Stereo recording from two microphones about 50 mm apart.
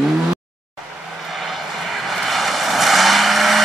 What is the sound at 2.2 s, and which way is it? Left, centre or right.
Vehicle, centre.